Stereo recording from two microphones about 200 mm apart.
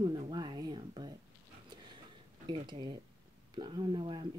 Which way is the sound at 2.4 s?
25° right (ahead or behind).